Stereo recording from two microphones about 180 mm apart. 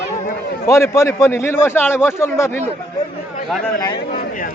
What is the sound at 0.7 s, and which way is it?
A man's voice, 15° left (ahead or behind).